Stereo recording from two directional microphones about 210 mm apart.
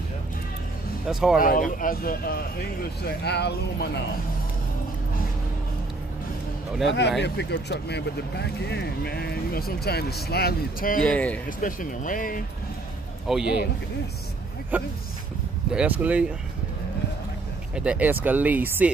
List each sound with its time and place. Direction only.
1.0 s speech: centre (ahead or behind)
1.4 s speech: 40° left (ahead or behind)
6.9 s speech: 55° left (ahead or behind)
11.0 s speech: 5° left (ahead or behind)
11.4 s speech: 40° left (ahead or behind)
13.3 s speech: 5° right (ahead or behind)
14.7 s speech: 10° right (ahead or behind)
17.7 s speech: 5° right (ahead or behind)